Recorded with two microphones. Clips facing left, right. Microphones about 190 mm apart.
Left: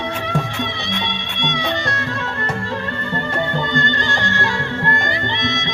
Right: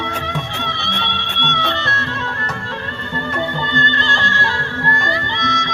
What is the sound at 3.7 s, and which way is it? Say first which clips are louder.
Music: left 1 dB; 15° left (ahead or behind).